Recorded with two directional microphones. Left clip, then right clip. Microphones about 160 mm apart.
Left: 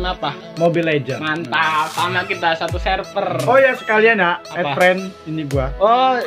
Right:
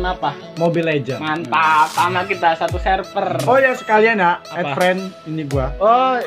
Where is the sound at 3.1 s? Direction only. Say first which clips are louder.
Even; 20° left (ahead or behind).